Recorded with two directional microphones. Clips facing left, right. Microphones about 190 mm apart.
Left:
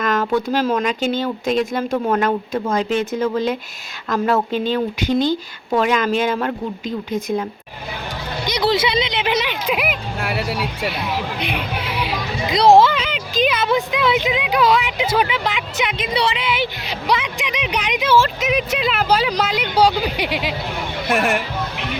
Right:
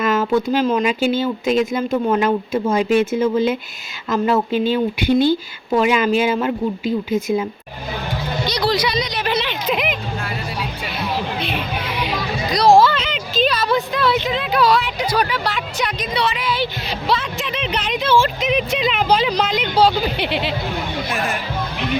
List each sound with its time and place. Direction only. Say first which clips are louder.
0.0 s a sound: right 2 dB; 5° right (ahead or behind)
0.5 s speech: right 2 dB; centre (ahead or behind)
8.6 s speech: left 3 dB; 20° left (ahead or behind)
10.2 s vehicle: left 4 dB; 75° left (ahead or behind)
11.3 s music: even; 15° left (ahead or behind)
12.5 s a sound: left 1 dB; 20° left (ahead or behind)
13.1 s a sound: even; 10° left (ahead or behind)
13.7 s speech: even; 15° left (ahead or behind)
16.8 s music: even; 15° left (ahead or behind)
18.2 s speech: even; 5° left (ahead or behind)
21.1 s speech: left 9 dB; 75° left (ahead or behind)